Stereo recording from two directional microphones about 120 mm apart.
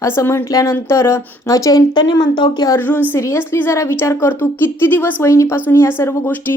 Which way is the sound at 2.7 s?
15° left (ahead or behind).